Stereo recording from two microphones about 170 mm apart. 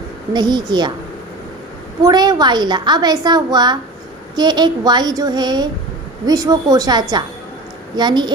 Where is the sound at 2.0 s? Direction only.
25° right (ahead or behind).